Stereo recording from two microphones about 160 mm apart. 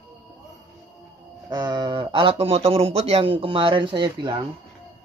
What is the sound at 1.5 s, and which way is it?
Speech, 25° right (ahead or behind).